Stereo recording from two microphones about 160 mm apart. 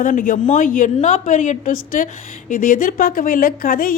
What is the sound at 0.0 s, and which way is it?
A woman's voice, 55° left (ahead or behind).